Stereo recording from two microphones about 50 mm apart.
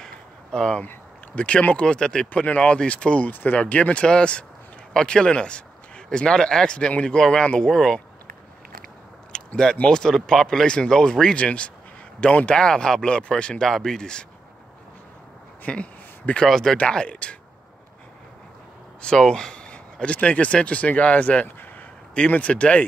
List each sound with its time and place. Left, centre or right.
0.0 s a sound: centre
1.3 s speech: left
3.3 s speech: left; by 8.0 s centre
9.3 s a sound: centre
9.8 s speech: centre
15.6 s a sound: left
16.4 s speech: centre
16.9 s speech: centre
18.9 s speech: centre